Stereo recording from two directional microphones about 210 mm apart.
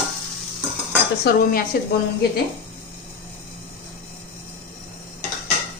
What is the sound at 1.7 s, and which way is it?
Speech, 45° left (ahead or behind).